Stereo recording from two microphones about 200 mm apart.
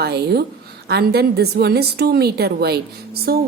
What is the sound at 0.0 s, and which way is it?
A woman's voice, 55° right (ahead or behind).